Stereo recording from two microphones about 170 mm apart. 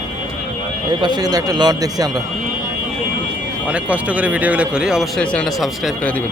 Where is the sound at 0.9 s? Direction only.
25° right (ahead or behind).